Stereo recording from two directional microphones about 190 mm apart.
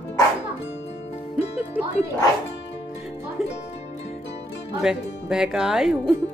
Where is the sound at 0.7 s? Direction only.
65° left (ahead or behind).